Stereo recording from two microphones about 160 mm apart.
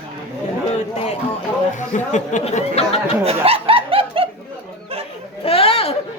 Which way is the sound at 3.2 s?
40° right (ahead or behind).